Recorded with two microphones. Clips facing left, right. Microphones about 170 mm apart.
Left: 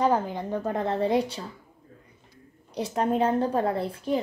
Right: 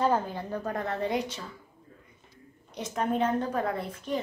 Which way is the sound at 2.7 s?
35° left (ahead or behind).